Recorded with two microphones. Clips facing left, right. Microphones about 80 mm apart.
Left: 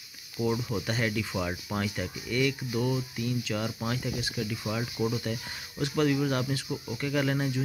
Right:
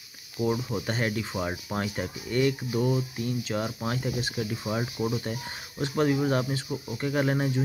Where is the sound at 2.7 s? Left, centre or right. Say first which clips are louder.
Right 3 dB; right.